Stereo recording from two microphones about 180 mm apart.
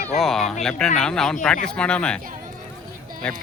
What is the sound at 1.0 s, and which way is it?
Speech, 5° left (ahead or behind).